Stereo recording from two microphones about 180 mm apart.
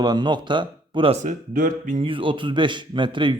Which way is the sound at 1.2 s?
50° right (ahead or behind).